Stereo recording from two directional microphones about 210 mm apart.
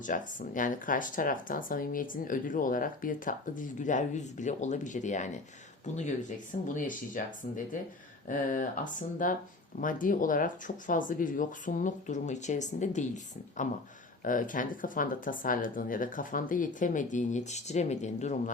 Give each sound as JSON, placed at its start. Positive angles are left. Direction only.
{"t": 0.0, "sound": "speech", "side_deg": 40}
{"t": 6.7, "sound": "speech", "side_deg": 40}
{"t": 14.3, "sound": "speech", "side_deg": 40}